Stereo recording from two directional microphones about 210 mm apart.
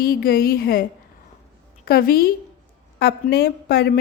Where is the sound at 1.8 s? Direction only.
45° left (ahead or behind).